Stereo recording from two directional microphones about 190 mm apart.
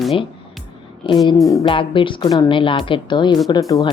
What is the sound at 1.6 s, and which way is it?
A woman's voice, 25° left (ahead or behind).